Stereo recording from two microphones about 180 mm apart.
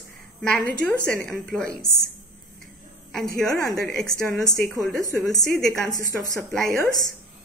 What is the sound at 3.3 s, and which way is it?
Speech, centre (ahead or behind).